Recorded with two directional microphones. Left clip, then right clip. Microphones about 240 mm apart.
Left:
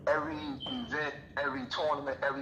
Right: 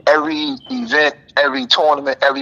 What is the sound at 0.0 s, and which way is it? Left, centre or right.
Speech, right.